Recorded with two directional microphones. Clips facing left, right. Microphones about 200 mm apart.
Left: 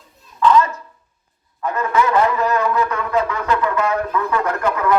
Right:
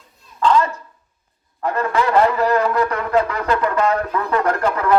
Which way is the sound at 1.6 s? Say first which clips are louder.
Even; 35° right (ahead or behind).